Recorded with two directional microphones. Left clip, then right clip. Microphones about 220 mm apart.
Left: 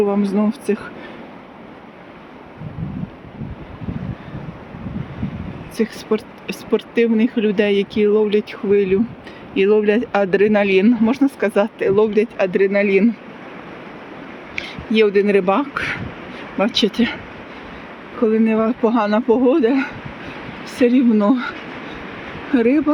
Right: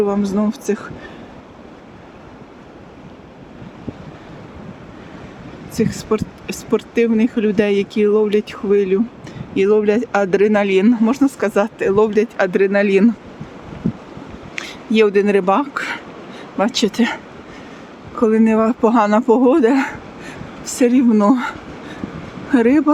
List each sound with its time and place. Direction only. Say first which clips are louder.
0.0 s speech: even; 5° right (ahead or behind)
5.7 s speech: right 1 dB; 10° right (ahead or behind)
14.6 s speech: right 1 dB; 15° right (ahead or behind)
18.2 s speech: right 2 dB; 20° right (ahead or behind)
22.5 s speech: right 2 dB; 20° right (ahead or behind)